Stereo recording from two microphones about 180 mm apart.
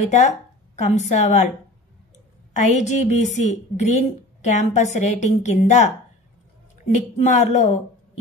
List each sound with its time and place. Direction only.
0.1 s a woman's voice: 40° left (ahead or behind)
2.5 s a woman's voice: 40° left (ahead or behind)
7.2 s a woman's voice: 40° left (ahead or behind)